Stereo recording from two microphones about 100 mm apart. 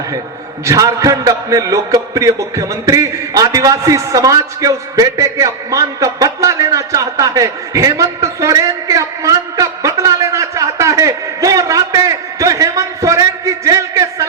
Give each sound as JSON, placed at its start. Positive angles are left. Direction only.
{"t": 0.6, "sound": "a man's voice", "side_deg": -35}